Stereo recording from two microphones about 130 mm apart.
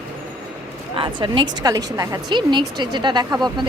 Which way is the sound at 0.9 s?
40° right (ahead or behind).